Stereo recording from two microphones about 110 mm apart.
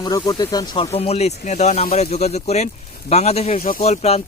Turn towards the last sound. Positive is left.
turn(degrees=75)  # may be behind; listen again after turning